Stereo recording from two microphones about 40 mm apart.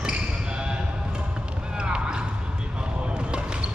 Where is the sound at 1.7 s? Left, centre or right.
Right.